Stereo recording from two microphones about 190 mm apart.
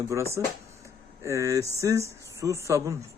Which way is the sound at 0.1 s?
15° right (ahead or behind).